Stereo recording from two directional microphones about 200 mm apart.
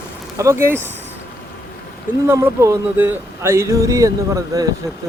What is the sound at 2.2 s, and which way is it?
Speech, 15° right (ahead or behind).